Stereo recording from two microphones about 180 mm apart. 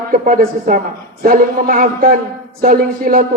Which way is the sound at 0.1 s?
50° right (ahead or behind).